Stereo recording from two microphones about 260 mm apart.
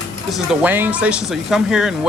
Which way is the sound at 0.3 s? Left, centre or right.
Centre.